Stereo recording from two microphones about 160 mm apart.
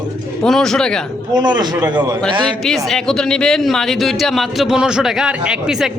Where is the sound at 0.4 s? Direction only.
5° left (ahead or behind).